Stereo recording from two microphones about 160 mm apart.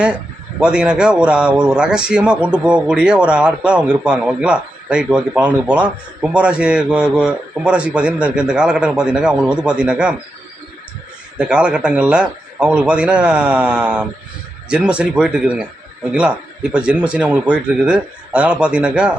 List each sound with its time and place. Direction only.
0.6 s a man's voice: 5° right (ahead or behind)
11.3 s a man's voice: 5° right (ahead or behind)